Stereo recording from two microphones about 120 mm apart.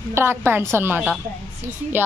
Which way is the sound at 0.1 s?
20° right (ahead or behind).